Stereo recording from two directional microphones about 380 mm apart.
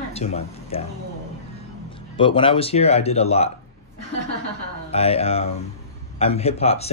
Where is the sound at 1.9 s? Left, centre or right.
Centre.